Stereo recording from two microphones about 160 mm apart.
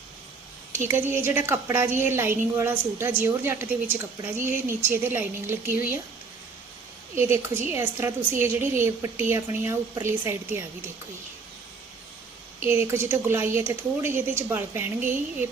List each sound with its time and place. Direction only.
0.9 s a woman's voice: 15° right (ahead or behind)
7.2 s a woman's voice: 15° right (ahead or behind)
12.6 s a woman's voice: 15° right (ahead or behind)